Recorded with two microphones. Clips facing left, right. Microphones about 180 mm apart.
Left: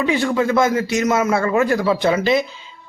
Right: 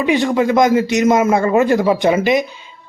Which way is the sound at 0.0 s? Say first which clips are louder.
Right 3 dB; 20° right (ahead or behind).